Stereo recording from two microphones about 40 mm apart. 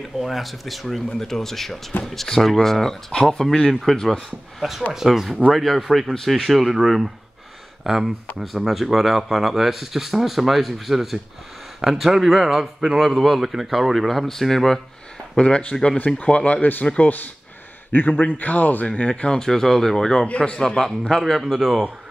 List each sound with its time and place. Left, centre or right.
0.2 s speech: centre
4.6 s a man's voice: centre
13.2 s a man's voice: centre
13.9 s speech: centre
15.3 s speech: left
17.9 s a man's voice: left
18.3 s speech: left
18.9 s speech: left
19.4 s speech: centre
20.2 s speech: left
20.6 s speech: centre